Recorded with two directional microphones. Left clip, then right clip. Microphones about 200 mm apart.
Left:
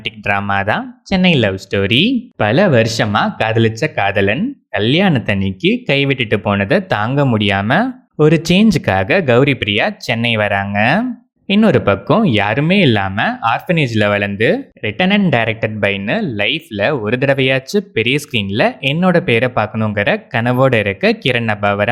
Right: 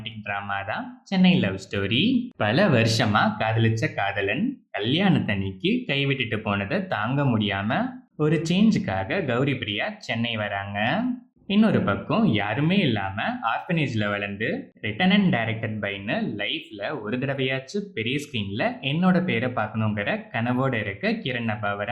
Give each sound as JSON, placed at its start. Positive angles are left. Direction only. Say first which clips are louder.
{"t": 0.0, "sound": "speech", "louder": "left 13 dB", "side_deg": 45}